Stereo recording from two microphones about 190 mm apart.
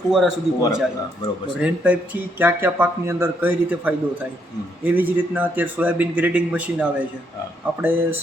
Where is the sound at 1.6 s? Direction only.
5° right (ahead or behind).